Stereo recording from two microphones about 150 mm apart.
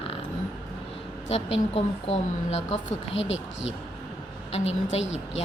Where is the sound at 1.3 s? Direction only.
40° left (ahead or behind).